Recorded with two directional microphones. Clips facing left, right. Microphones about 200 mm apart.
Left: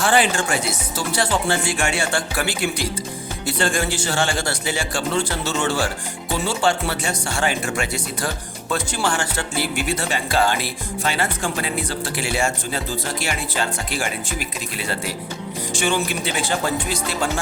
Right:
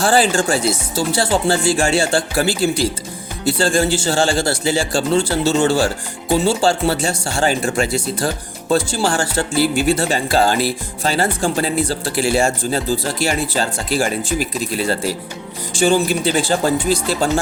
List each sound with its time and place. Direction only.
0.0 s speech: 35° right (ahead or behind)